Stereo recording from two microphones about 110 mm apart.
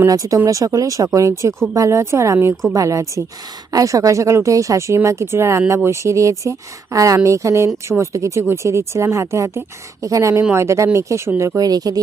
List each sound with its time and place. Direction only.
0.1 s speech: 30° right (ahead or behind)